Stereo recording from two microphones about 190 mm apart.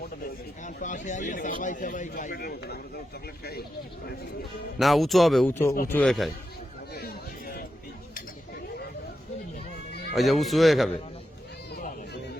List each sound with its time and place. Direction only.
0.6 s a man's voice: 40° left (ahead or behind)
4.8 s speech: centre (ahead or behind)
5.5 s speech: 10° left (ahead or behind)
6.9 s chatter: 55° left (ahead or behind)
10.2 s speech: centre (ahead or behind)